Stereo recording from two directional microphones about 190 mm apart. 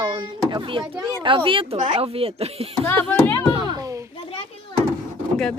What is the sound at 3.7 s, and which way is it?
Children playing, 15° right (ahead or behind).